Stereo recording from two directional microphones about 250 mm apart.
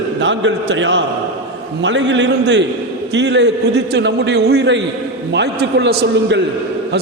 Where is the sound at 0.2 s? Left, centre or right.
Right.